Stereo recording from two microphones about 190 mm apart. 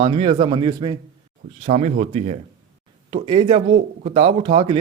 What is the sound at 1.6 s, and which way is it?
A man's voice, 35° right (ahead or behind).